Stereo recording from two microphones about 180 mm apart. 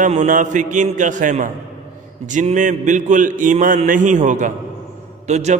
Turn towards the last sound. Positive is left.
turn(degrees=-40)  # may be behind; listen again after turning